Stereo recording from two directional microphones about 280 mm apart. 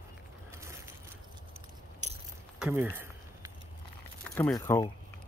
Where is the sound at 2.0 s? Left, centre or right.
Right.